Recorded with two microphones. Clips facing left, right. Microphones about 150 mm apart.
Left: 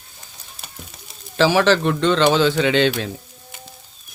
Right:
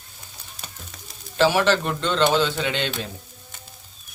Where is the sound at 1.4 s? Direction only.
90° left.